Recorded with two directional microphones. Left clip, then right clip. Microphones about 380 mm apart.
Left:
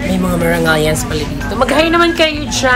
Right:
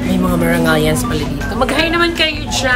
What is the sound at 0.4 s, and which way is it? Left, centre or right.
A woman's voice, centre.